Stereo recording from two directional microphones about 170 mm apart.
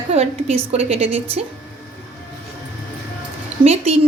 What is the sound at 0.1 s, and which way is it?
A woman's voice, 40° right (ahead or behind).